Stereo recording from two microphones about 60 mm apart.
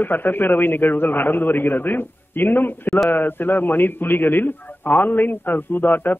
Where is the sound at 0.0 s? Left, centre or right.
Left.